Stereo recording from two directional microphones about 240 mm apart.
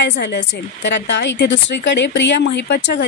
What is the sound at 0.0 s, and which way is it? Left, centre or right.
A woman's voice, left.